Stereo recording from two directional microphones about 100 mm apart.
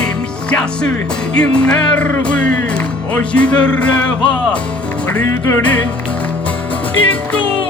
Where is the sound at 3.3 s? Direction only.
10° left (ahead or behind).